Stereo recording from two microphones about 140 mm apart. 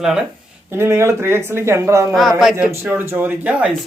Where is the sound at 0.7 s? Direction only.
15° right (ahead or behind).